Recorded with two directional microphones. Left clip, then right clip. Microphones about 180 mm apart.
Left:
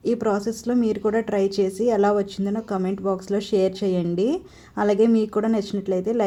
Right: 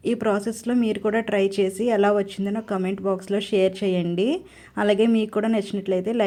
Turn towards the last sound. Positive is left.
turn(degrees=-15)  # may be behind; listen again after turning